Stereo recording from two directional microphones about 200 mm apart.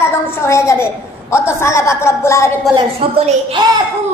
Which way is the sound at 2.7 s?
25° right (ahead or behind).